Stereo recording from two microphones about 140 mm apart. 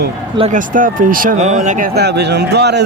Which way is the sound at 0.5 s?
70° right (ahead or behind).